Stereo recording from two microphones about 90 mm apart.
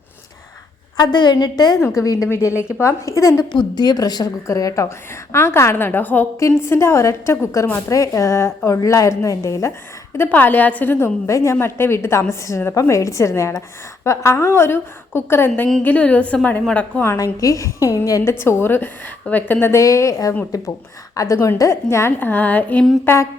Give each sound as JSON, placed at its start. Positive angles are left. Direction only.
{"t": 0.9, "sound": "a woman's voice", "side_deg": 55}
{"t": 2.0, "sound": "a woman's voice", "side_deg": 40}
{"t": 3.5, "sound": "a woman's voice", "side_deg": 55}
{"t": 4.4, "sound": "a woman's voice", "side_deg": 35}
{"t": 10.2, "sound": "a woman's voice", "side_deg": 20}
{"t": 11.3, "sound": "a woman's voice", "side_deg": 35}
{"t": 17.4, "sound": "a woman's voice", "side_deg": 35}
{"t": 18.3, "sound": "a woman's voice", "side_deg": 25}